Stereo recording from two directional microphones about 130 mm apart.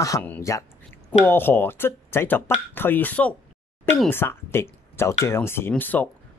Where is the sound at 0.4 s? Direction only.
25° left (ahead or behind).